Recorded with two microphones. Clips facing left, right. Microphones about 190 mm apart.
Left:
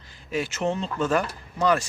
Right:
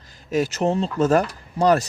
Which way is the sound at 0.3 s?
40° right (ahead or behind).